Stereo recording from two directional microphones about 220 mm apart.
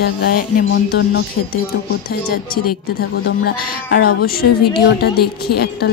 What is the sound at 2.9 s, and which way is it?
A woman's voice, 45° left (ahead or behind).